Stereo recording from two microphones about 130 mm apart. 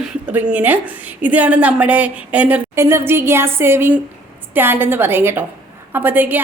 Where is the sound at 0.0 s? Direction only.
10° right (ahead or behind).